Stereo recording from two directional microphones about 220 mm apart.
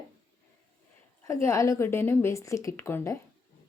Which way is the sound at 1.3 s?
15° left (ahead or behind).